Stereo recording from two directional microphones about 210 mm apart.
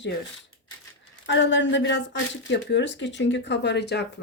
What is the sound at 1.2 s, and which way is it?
A woman's voice, 60° left (ahead or behind).